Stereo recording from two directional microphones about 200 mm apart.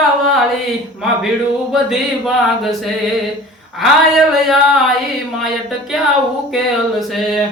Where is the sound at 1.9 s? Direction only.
Centre (ahead or behind).